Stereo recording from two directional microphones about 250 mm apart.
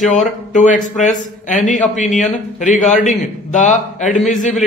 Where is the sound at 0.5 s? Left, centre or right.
Left.